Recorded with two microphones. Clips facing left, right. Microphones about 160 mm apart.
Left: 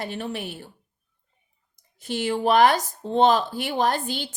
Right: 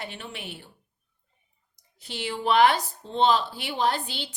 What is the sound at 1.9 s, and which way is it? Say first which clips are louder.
Speech: left 7 dB; 45° left (ahead or behind).